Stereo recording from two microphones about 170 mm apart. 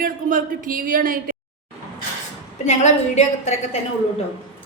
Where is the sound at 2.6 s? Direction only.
45° left (ahead or behind).